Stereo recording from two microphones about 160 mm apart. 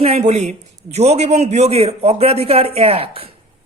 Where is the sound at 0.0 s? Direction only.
40° right (ahead or behind).